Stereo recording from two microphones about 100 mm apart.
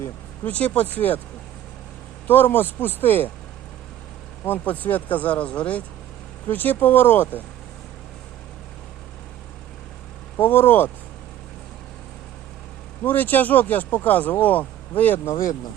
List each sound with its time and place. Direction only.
0.0 s speech: 15° left (ahead or behind)
2.2 s speech: 20° left (ahead or behind)
4.4 s speech: 15° left (ahead or behind)
10.3 s speech: 20° left (ahead or behind)
13.0 s speech: 15° left (ahead or behind)